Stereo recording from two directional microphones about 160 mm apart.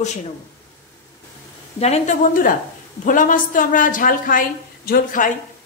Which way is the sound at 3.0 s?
55° left (ahead or behind).